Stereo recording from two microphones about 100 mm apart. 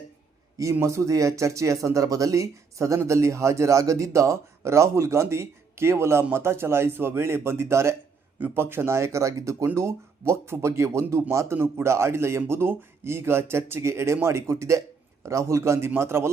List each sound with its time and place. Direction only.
0.6 s speech: 30° right (ahead or behind)